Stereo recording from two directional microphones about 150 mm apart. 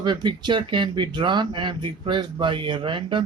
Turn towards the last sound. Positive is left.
turn(degrees=-35)  # may be behind; listen again after turning